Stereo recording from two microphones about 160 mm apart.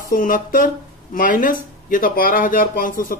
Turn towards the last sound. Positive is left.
turn(degrees=60)  # may be behind; listen again after turning